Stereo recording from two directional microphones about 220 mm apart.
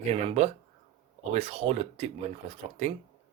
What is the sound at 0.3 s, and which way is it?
Speech, 30° right (ahead or behind).